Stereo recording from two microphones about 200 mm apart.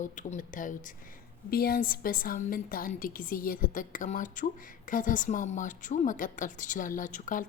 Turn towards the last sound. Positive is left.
turn(degrees=40)  # may be behind; listen again after turning